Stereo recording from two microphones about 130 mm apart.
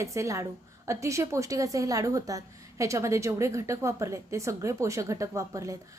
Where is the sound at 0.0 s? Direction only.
25° right (ahead or behind).